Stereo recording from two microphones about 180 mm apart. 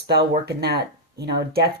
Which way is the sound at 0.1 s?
65° right (ahead or behind).